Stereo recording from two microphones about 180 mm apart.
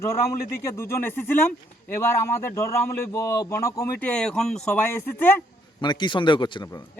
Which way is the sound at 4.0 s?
5° left (ahead or behind).